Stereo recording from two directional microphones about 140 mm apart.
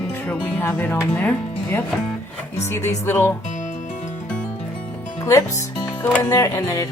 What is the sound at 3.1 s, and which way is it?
Speech, 15° left (ahead or behind).